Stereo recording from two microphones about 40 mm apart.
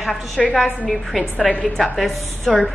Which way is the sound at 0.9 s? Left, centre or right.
Centre.